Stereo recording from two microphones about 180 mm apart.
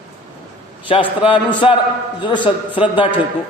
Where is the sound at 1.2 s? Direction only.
30° left (ahead or behind).